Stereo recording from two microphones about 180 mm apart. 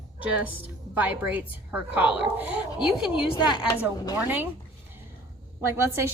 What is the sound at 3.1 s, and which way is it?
Speech, 25° left (ahead or behind).